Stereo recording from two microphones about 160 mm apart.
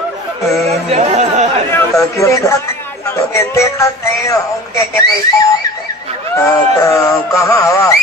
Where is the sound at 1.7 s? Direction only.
15° left (ahead or behind).